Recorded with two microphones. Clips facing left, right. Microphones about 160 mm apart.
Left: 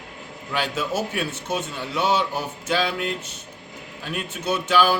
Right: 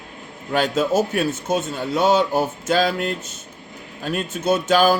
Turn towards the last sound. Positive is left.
turn(degrees=-40)  # may be behind; listen again after turning